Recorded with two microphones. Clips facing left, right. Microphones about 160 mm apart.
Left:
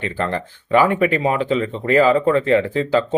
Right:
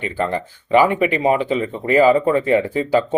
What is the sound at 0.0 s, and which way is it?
Speech, 15° right (ahead or behind).